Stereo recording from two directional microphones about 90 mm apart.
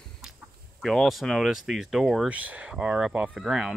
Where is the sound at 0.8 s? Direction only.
Centre (ahead or behind).